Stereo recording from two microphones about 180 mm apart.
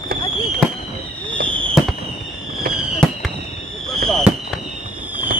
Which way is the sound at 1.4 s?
5° left (ahead or behind).